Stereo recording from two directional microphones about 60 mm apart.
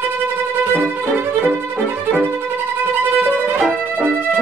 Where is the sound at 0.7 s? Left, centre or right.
Right.